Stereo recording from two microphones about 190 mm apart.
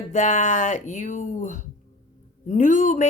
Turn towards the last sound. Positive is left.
turn(degrees=40)  # may be behind; listen again after turning